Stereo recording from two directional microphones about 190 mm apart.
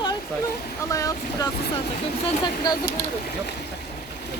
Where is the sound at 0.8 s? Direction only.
15° left (ahead or behind).